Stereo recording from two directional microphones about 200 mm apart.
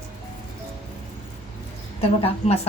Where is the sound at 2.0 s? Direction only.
30° left (ahead or behind).